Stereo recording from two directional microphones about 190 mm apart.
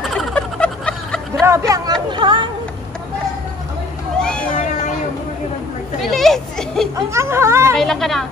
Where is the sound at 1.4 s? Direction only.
15° right (ahead or behind).